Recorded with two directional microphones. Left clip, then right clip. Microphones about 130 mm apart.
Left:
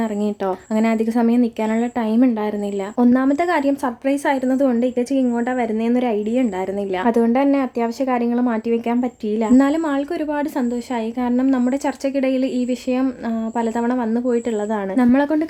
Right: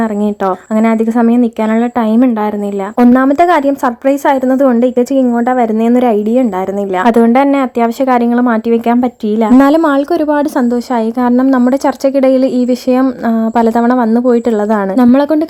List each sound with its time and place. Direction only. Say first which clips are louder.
0.4 s speech: right 8 dB; 15° right (ahead or behind)
3.0 s speech: right 9 dB; 35° right (ahead or behind)
9.6 s speech: right 11 dB; 60° right (ahead or behind); by 15.4 s 40° right (ahead or behind)